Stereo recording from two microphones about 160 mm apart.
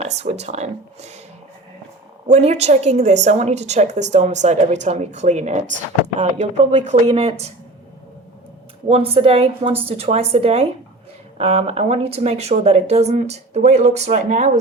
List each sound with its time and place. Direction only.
0.0 s a woman's voice: 45° right (ahead or behind)
2.2 s a woman's voice: 45° right (ahead or behind)
8.9 s a woman's voice: 35° right (ahead or behind)